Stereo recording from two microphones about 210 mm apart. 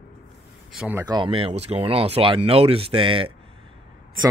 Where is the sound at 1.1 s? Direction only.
25° right (ahead or behind).